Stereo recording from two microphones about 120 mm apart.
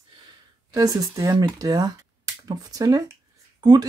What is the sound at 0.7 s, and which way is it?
Speech, 30° right (ahead or behind).